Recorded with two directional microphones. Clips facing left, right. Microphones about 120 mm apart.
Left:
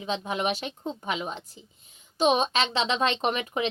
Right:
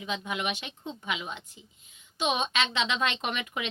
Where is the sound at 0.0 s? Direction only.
30° left (ahead or behind).